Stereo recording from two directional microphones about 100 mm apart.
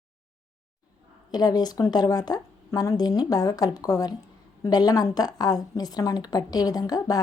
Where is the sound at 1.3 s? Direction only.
40° left (ahead or behind).